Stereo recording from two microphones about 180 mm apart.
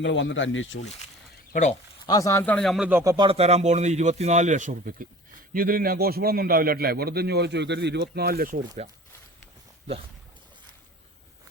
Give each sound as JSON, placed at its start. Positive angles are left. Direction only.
{"t": 0.0, "sound": "speech", "side_deg": 90}
{"t": 2.0, "sound": "speech", "side_deg": 20}
{"t": 3.0, "sound": "speech", "side_deg": -20}
{"t": 3.2, "sound": "a man's voice", "side_deg": -35}